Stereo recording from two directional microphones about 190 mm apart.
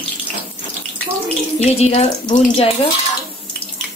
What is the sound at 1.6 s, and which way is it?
Speech, 35° left (ahead or behind).